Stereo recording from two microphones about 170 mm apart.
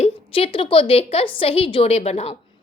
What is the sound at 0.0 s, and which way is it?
A woman's voice, 35° left (ahead or behind).